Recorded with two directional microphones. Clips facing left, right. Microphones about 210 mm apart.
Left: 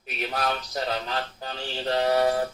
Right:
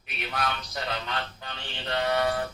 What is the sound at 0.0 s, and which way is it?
A man's voice, 40° left (ahead or behind).